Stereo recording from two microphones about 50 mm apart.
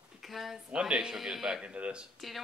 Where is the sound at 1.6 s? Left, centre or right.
Right.